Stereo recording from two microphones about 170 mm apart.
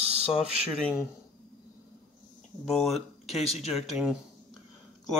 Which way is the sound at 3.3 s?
40° left (ahead or behind).